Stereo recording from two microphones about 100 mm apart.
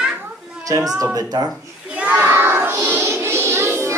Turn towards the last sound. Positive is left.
turn(degrees=-25)  # may be behind; listen again after turning